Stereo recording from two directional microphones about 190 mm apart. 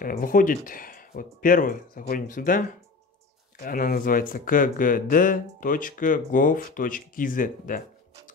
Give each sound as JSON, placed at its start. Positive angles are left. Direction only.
{"t": 0.0, "sound": "speech", "side_deg": 45}